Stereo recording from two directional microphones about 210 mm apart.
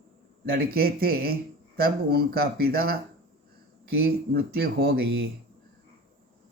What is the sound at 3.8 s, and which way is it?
Speech, 45° right (ahead or behind).